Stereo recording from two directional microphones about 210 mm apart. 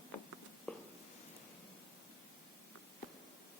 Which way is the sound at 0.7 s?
5° left (ahead or behind).